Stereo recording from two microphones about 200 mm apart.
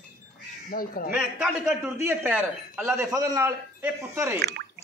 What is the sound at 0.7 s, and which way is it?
Speech, 45° left (ahead or behind).